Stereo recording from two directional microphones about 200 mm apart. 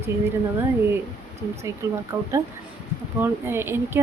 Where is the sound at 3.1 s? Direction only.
10° right (ahead or behind).